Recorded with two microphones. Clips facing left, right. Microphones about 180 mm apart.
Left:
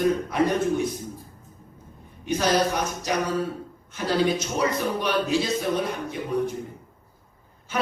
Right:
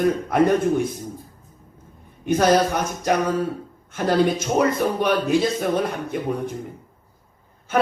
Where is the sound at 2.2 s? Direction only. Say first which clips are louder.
Right 5 dB; 50° right (ahead or behind).